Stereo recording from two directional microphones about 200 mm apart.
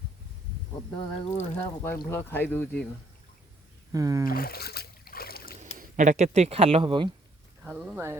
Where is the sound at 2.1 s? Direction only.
10° left (ahead or behind).